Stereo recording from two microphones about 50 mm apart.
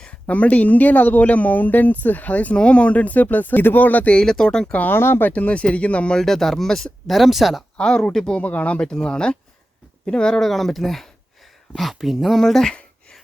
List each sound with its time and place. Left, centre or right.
0.0 s speech: left
4.2 s speech: centre
4.9 s speech: left
5.3 s speech: left
6.1 s speech: centre
7.1 s speech: centre
7.8 s speech: centre
8.4 s speech: left
8.8 s speech: centre
10.4 s speech: centre